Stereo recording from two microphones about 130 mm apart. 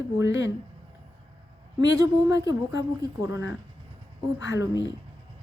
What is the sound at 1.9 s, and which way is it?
A woman's voice, 25° right (ahead or behind).